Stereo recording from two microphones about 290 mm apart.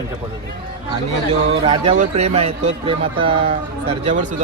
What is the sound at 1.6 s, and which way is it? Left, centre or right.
Speech, right.